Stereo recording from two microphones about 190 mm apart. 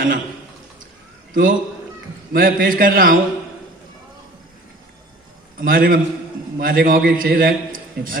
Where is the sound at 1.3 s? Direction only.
45° right (ahead or behind).